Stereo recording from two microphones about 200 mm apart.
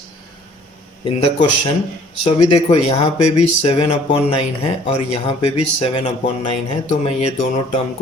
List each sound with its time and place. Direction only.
1.0 s speech: 25° left (ahead or behind)